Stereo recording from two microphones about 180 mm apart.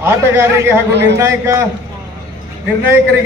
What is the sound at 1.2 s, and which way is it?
Speech, 15° right (ahead or behind).